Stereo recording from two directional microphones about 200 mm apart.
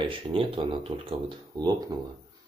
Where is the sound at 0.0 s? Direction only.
25° right (ahead or behind).